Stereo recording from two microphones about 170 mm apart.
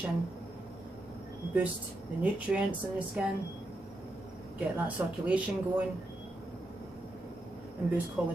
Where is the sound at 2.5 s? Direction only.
Centre (ahead or behind).